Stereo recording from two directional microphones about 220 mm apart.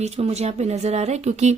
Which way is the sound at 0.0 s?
30° right (ahead or behind).